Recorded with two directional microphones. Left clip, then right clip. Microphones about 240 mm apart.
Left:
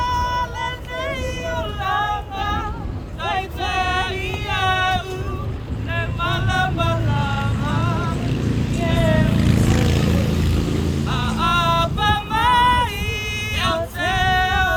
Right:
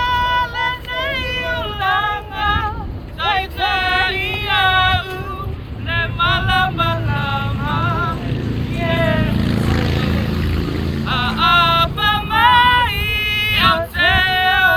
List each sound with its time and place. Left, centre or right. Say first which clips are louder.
0.0 s child singing: right 5 dB; centre
3.2 s male singing: right 5 dB; centre
5.9 s a sound: right 7 dB; centre
9.4 s vehicle: even; left
11.1 s music: right 6 dB; centre